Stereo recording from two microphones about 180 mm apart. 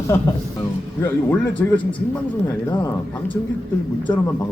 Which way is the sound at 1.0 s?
10° left (ahead or behind).